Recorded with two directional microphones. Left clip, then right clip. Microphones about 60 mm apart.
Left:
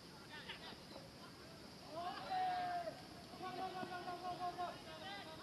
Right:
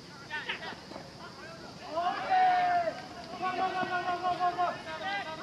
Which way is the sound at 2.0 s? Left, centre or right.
Right.